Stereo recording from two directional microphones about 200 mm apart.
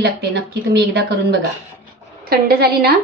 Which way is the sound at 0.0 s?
55° right (ahead or behind).